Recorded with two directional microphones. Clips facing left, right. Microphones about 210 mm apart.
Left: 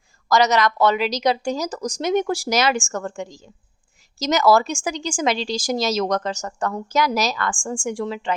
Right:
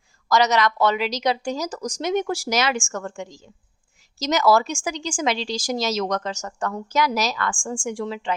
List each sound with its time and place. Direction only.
0.3 s a woman's voice: 45° left (ahead or behind)